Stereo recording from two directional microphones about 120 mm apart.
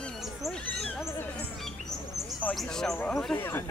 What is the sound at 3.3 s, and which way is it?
Speech, 20° left (ahead or behind).